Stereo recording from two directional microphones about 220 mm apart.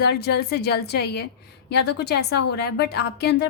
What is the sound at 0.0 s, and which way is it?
A woman's voice, 50° left (ahead or behind).